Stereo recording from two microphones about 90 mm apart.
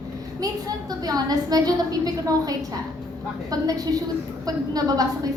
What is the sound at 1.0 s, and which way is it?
A woman's voice, 45° right (ahead or behind).